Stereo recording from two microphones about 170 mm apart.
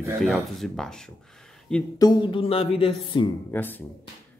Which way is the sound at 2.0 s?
25° left (ahead or behind).